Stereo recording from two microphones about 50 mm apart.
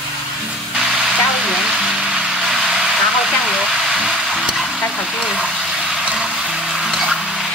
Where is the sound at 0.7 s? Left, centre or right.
Centre.